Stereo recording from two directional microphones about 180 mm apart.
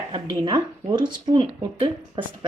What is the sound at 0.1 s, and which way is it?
Speech, 25° right (ahead or behind).